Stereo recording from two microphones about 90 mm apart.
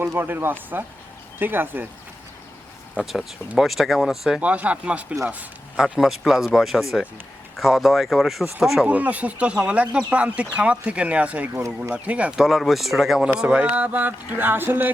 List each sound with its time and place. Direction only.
0.0 s speech: 25° right (ahead or behind)
3.0 s speech: centre (ahead or behind)
4.4 s a man's voice: 15° right (ahead or behind)
5.8 s speech: 5° right (ahead or behind)
8.9 s a man's voice: 15° right (ahead or behind)
12.4 s a man's voice: centre (ahead or behind); by 14.9 s 20° right (ahead or behind)